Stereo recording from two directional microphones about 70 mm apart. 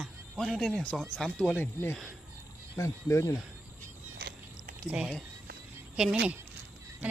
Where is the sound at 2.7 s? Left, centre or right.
Left.